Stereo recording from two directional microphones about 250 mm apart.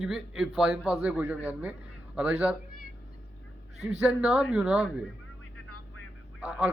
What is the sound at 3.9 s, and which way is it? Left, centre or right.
Speech, centre.